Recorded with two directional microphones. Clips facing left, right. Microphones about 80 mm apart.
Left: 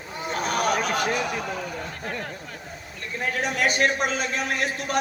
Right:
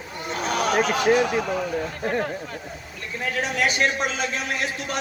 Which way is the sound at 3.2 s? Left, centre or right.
Left.